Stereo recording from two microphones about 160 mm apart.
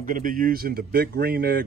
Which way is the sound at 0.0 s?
60° right (ahead or behind).